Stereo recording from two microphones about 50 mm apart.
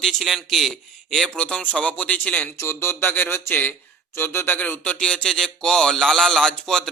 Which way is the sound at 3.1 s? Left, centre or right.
Left.